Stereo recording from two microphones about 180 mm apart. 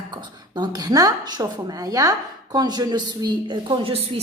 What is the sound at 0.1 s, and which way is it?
A woman's voice, 25° right (ahead or behind).